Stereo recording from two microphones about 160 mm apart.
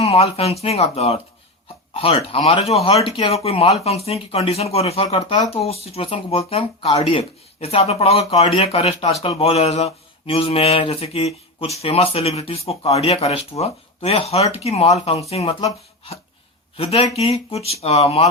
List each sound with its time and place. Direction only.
0.0 s speech: 40° left (ahead or behind)
16.7 s speech: 35° left (ahead or behind)